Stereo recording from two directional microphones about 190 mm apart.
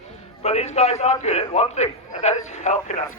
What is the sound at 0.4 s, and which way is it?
A man's voice, 35° left (ahead or behind).